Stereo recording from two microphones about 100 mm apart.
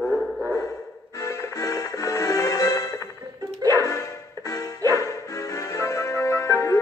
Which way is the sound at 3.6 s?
35° right (ahead or behind).